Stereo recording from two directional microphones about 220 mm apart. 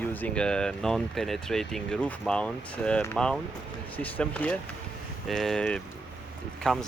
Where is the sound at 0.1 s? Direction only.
5° left (ahead or behind).